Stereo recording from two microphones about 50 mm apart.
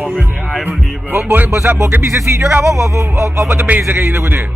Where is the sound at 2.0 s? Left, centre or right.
Right.